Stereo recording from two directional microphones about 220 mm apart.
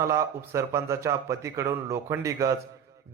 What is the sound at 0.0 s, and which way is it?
A man's voice, 15° right (ahead or behind).